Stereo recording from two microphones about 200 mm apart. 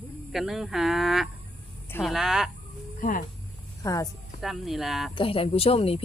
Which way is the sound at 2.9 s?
45° left (ahead or behind).